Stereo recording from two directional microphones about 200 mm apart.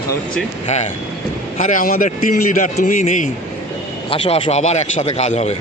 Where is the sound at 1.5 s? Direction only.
40° left (ahead or behind).